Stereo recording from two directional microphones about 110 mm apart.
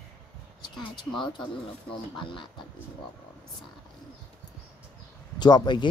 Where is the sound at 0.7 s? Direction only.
45° left (ahead or behind).